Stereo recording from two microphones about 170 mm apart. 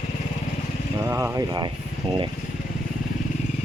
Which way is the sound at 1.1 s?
15° right (ahead or behind).